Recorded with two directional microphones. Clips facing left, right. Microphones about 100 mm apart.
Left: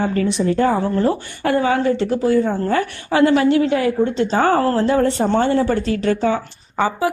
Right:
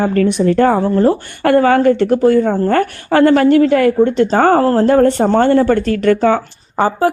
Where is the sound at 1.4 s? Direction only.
65° right (ahead or behind).